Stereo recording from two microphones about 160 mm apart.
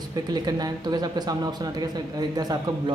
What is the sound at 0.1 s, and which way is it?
Speech, 25° right (ahead or behind).